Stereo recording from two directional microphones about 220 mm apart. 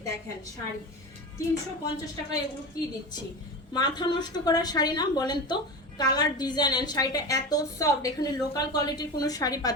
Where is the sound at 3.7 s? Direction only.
20° left (ahead or behind).